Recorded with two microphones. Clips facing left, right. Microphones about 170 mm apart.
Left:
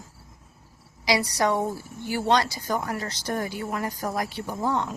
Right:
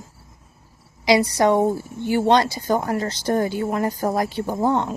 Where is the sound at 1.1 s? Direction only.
25° right (ahead or behind).